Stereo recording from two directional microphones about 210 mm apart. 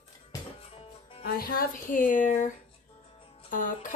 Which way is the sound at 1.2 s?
45° left (ahead or behind).